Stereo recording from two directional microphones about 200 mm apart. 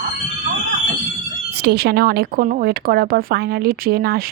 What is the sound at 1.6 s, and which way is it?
A woman's voice, 55° right (ahead or behind).